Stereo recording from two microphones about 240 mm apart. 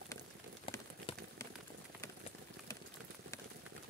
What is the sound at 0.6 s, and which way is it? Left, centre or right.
Rain on surface, centre.